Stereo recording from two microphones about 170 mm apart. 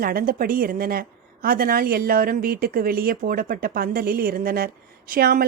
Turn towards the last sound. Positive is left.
turn(degrees=-60)  # may be behind; listen again after turning